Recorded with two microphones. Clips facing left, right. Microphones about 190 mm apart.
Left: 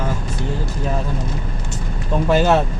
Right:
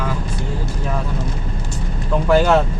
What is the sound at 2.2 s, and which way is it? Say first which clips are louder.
Speech: right 1 dB; 20° left (ahead or behind).